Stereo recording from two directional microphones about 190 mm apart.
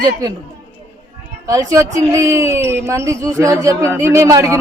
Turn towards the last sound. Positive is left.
turn(degrees=-15)  # may be behind; listen again after turning